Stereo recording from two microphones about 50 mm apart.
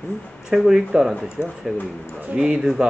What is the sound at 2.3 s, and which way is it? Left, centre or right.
Speech, centre.